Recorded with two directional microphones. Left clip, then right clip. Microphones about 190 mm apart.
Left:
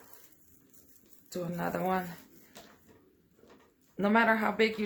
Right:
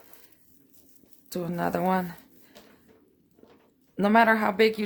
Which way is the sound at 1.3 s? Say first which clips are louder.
Right 6 dB; 55° right (ahead or behind).